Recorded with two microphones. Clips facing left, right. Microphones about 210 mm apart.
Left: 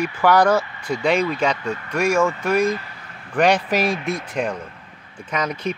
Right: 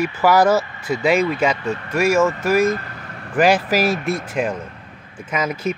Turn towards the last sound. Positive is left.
turn(degrees=-5)  # may be behind; listen again after turning